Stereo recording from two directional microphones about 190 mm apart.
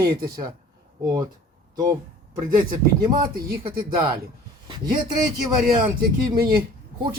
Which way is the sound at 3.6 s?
25° right (ahead or behind).